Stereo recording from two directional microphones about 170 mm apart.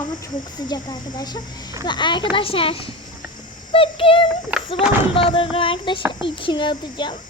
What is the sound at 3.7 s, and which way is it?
Child singing, 30° left (ahead or behind).